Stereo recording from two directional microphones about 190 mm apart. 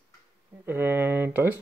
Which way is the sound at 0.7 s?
10° right (ahead or behind).